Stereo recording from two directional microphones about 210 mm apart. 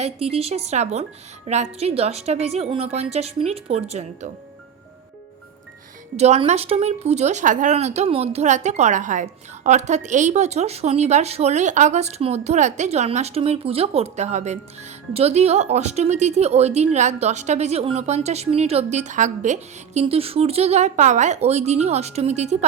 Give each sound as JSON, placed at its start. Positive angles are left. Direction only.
{"t": 0.0, "sound": "speech", "side_deg": -30}
{"t": 6.1, "sound": "speech", "side_deg": -30}